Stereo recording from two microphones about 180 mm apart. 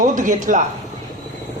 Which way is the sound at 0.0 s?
45° right (ahead or behind).